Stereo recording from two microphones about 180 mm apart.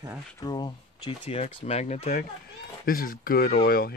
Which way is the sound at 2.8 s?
55° left (ahead or behind).